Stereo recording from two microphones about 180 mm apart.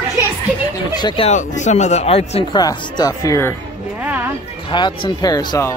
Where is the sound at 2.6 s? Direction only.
20° left (ahead or behind).